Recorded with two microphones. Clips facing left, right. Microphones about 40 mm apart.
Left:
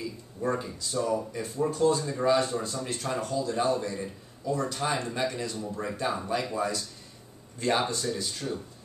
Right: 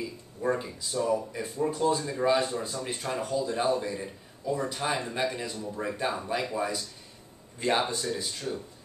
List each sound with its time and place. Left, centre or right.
0.4 s a man's voice: centre